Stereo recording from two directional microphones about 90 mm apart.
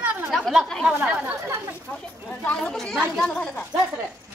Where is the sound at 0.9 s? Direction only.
15° right (ahead or behind).